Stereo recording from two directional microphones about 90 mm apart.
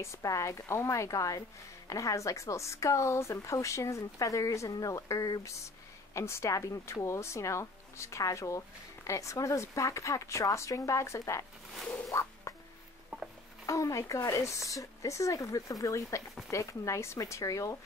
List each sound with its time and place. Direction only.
0.0 s speech: 35° left (ahead or behind)
12.1 s a sound: 35° left (ahead or behind)
13.7 s speech: 35° left (ahead or behind)